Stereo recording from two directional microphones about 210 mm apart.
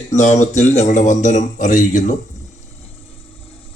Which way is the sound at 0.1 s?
35° left (ahead or behind).